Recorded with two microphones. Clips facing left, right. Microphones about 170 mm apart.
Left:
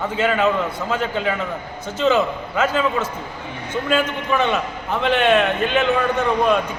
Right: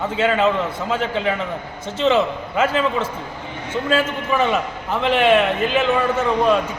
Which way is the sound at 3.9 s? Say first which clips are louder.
Even; 5° right (ahead or behind).